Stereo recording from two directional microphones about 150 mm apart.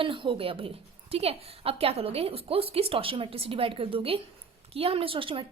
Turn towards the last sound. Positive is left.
turn(degrees=-35)  # may be behind; listen again after turning